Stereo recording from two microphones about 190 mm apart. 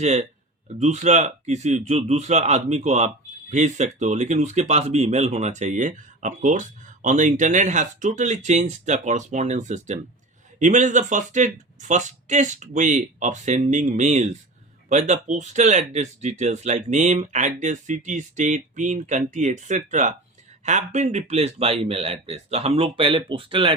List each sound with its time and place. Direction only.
0.0 s speech: 35° right (ahead or behind)